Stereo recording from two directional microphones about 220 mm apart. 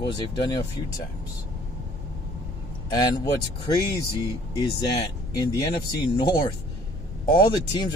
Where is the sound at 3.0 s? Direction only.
15° left (ahead or behind).